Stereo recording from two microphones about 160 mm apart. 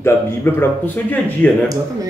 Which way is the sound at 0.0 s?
15° left (ahead or behind).